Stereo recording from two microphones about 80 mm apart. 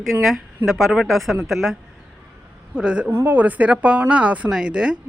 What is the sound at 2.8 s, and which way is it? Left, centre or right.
Speech, centre.